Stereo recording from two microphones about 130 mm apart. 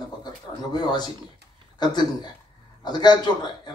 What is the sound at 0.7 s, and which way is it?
A man's voice, 30° left (ahead or behind).